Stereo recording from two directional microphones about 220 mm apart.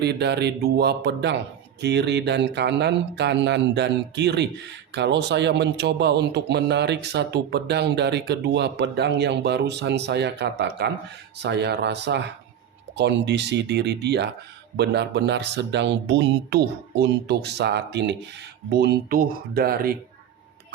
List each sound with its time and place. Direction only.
0.0 s a man's voice: 50° right (ahead or behind)